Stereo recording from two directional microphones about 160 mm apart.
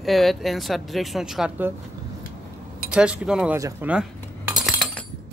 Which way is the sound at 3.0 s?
5° right (ahead or behind).